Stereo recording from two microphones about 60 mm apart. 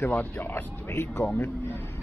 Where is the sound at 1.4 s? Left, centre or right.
Left.